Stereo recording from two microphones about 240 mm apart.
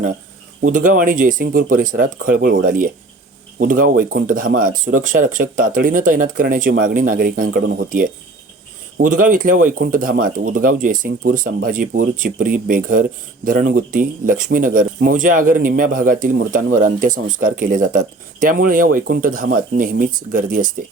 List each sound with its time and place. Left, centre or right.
0.6 s speech: right